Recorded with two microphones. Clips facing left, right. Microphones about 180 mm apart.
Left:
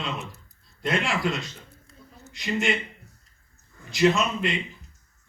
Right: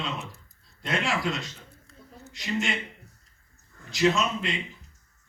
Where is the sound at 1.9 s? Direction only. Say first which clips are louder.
Even; 15° left (ahead or behind).